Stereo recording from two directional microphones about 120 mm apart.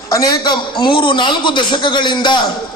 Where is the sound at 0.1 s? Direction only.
30° left (ahead or behind).